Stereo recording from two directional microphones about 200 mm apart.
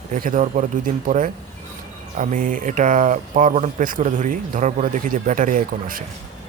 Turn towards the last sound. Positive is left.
turn(degrees=-45)  # may be behind; listen again after turning